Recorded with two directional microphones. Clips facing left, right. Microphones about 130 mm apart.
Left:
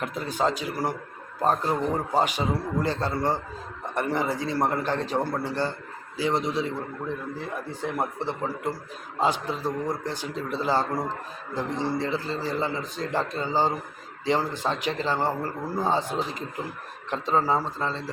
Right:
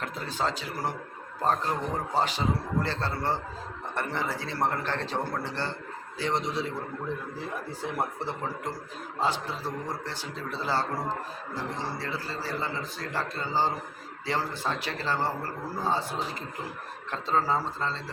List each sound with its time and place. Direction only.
0.0 s a man's voice: 15° left (ahead or behind)
9.2 s a man's voice: 15° left (ahead or behind)